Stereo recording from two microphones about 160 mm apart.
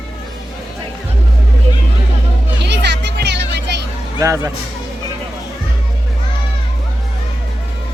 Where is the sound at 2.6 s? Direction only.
90° right.